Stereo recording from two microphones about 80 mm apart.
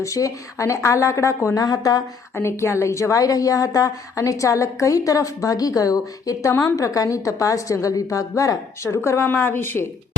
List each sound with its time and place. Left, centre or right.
0.0 s speech: left
1.5 s a woman's voice: left
2.3 s a woman's voice: left
9.3 s a woman's voice: left